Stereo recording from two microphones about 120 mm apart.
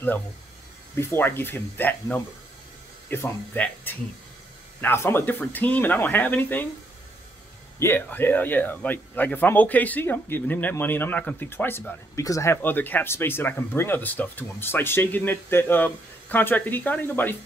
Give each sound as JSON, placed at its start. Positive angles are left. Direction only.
{"t": 0.9, "sound": "speech", "side_deg": 20}
{"t": 7.8, "sound": "speech", "side_deg": 20}
{"t": 12.6, "sound": "speech", "side_deg": 15}